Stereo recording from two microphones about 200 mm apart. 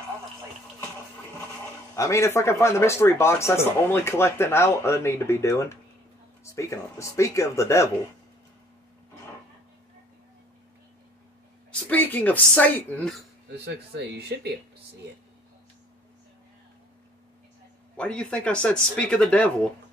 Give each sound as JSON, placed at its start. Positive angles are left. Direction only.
{"t": 2.0, "sound": "speech", "side_deg": 15}
{"t": 11.7, "sound": "speech", "side_deg": 10}
{"t": 13.7, "sound": "speech", "side_deg": -55}
{"t": 17.9, "sound": "speech", "side_deg": 5}